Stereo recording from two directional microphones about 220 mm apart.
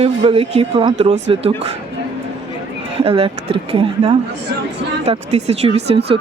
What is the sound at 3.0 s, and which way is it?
Speech, 25° right (ahead or behind).